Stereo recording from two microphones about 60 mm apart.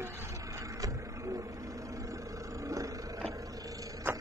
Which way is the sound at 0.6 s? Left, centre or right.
Right.